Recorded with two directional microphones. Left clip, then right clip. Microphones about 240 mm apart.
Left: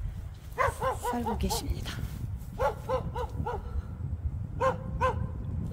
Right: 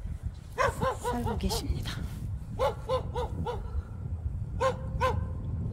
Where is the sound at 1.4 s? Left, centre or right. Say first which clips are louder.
Left 1 dB; centre.